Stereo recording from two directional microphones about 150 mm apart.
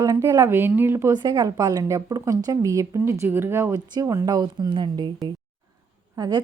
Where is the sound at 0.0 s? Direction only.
20° right (ahead or behind).